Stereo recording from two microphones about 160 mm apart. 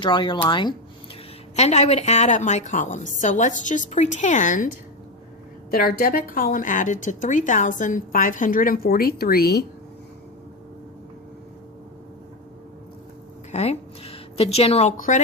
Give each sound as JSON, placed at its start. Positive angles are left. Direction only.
{"t": 0.0, "sound": "speech", "side_deg": 30}
{"t": 1.5, "sound": "a woman's voice", "side_deg": 45}
{"t": 5.7, "sound": "a woman's voice", "side_deg": 65}
{"t": 13.5, "sound": "a woman's voice", "side_deg": 40}